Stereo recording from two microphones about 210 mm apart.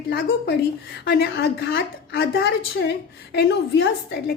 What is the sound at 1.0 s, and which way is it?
A woman's voice, 50° left (ahead or behind).